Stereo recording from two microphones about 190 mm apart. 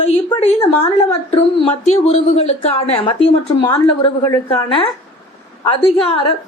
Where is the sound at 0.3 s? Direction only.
35° left (ahead or behind).